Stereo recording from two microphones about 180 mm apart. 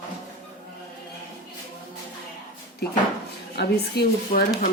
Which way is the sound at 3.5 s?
65° left (ahead or behind).